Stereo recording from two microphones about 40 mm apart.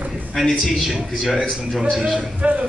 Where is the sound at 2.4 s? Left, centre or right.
Right.